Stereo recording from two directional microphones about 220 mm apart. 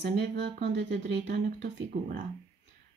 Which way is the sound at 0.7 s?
55° right (ahead or behind).